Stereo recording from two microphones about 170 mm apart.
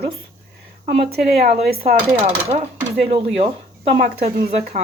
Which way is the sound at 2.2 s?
35° right (ahead or behind).